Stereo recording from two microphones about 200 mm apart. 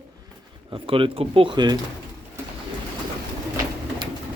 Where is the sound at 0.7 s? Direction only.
25° right (ahead or behind).